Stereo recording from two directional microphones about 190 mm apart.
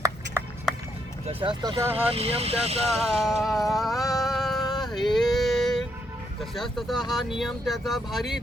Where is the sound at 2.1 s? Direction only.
30° right (ahead or behind).